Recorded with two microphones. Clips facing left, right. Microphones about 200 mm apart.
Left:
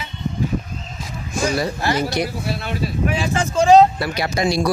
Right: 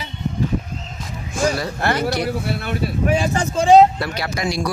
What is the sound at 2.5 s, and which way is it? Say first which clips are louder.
Speech: right 1 dB; 55° right (ahead or behind).